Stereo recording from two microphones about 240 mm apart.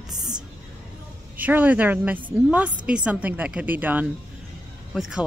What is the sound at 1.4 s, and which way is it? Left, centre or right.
A woman's voice, centre.